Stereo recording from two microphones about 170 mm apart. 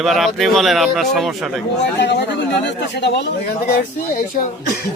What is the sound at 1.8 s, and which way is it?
Speech, 90° left.